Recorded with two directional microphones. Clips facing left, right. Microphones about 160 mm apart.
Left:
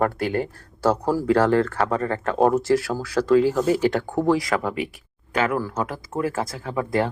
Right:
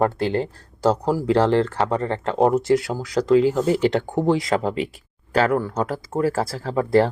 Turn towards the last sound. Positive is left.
turn(degrees=-35)  # may be behind; listen again after turning